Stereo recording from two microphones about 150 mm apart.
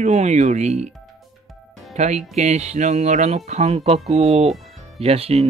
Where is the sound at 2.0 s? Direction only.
45° right (ahead or behind).